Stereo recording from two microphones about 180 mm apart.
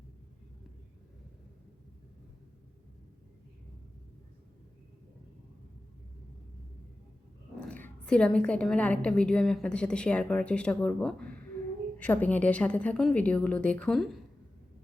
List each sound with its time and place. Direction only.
7.6 s a woman's voice: 10° left (ahead or behind)